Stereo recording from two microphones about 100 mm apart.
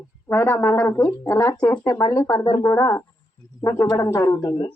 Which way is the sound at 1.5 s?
15° left (ahead or behind).